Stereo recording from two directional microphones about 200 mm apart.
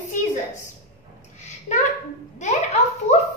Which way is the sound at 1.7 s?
35° left (ahead or behind).